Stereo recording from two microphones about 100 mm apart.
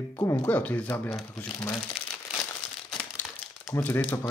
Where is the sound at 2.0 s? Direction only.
75° left (ahead or behind).